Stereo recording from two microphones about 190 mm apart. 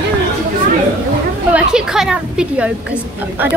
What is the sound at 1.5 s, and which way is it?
A woman's voice, 5° right (ahead or behind).